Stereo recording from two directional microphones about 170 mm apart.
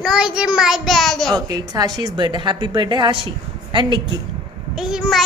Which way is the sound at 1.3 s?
20° right (ahead or behind).